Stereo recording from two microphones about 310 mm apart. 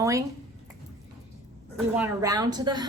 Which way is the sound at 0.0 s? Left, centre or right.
Centre.